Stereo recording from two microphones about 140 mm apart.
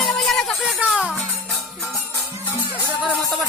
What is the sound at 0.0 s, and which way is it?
Music, centre (ahead or behind).